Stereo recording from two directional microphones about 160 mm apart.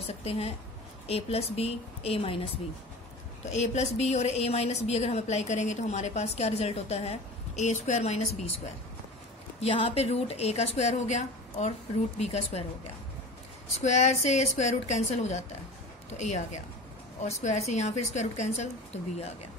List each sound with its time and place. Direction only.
0.0 s a woman's voice: 40° left (ahead or behind)
9.6 s a woman's voice: 35° left (ahead or behind)
13.7 s speech: 45° left (ahead or behind)